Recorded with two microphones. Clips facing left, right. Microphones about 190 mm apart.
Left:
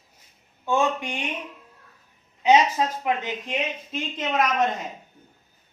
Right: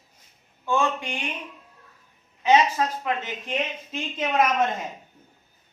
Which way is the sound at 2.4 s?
15° left (ahead or behind).